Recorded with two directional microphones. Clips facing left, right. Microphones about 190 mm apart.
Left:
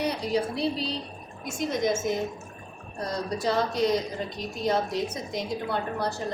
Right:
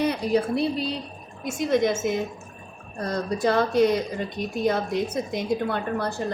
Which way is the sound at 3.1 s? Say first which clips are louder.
Right 4 dB; 55° right (ahead or behind).